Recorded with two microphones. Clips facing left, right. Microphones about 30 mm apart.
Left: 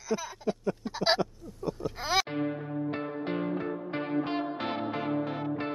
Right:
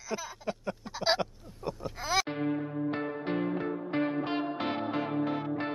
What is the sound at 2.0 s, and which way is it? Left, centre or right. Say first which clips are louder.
Music: left 1 dB; centre.